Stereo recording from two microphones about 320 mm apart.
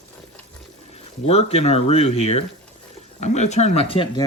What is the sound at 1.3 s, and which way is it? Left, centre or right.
Speech, centre.